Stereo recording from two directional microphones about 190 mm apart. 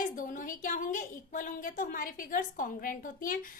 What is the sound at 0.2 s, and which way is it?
A woman's voice, 45° left (ahead or behind).